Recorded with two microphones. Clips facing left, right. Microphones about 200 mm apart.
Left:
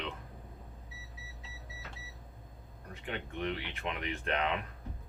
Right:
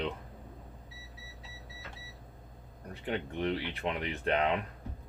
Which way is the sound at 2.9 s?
35° right (ahead or behind).